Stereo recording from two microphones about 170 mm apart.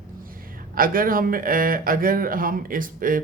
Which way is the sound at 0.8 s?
55° right (ahead or behind).